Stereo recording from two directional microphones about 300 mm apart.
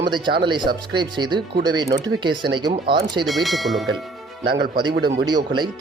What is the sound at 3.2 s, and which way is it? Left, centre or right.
Speech, centre.